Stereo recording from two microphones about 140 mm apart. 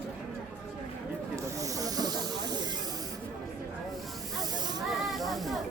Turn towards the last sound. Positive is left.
turn(degrees=0)  # may be behind; listen again after turning